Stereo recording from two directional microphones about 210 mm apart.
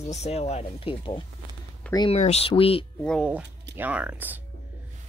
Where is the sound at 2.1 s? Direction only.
30° left (ahead or behind).